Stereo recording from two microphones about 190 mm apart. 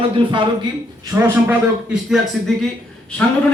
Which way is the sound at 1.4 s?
5° right (ahead or behind).